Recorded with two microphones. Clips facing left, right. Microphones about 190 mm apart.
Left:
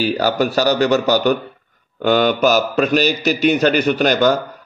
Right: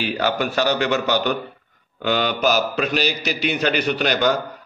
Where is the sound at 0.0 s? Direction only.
40° left (ahead or behind).